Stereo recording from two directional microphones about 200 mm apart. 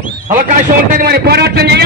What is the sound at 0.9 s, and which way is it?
Speech, 50° right (ahead or behind).